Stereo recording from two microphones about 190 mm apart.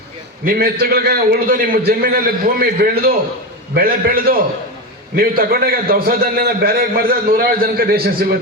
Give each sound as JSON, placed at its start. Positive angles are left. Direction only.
{"t": 0.4, "sound": "a man's voice", "side_deg": -55}